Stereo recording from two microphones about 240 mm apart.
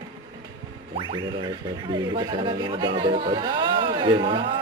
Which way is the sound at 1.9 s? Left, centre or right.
Centre.